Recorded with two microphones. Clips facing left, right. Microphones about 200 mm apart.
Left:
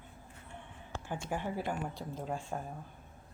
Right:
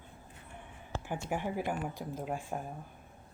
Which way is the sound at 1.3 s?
15° right (ahead or behind).